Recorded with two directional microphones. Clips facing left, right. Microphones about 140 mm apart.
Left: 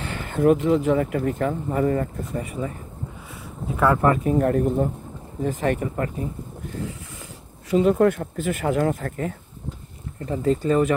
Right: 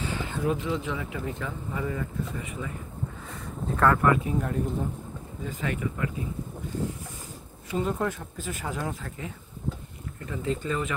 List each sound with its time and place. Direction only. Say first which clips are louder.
0.0 s a sound: left 8 dB; 60° left (ahead or behind)
0.6 s speech: left 11 dB; 40° left (ahead or behind)
3.3 s a sound: left 2 dB; 10° left (ahead or behind)
4.0 s speech: left 5 dB; 45° left (ahead or behind); by 4.8 s 65° left (ahead or behind)
5.4 s speech: left 8 dB; 45° left (ahead or behind)
7.7 s speech: left 10 dB; 85° left; by 9.3 s 55° left (ahead or behind)
10.2 s speech: left 9 dB; 35° left (ahead or behind)